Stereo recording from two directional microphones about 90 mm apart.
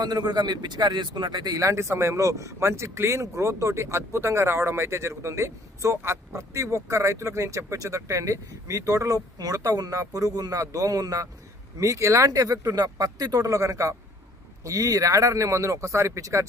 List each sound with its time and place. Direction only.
0.0 s speech: 50° right (ahead or behind)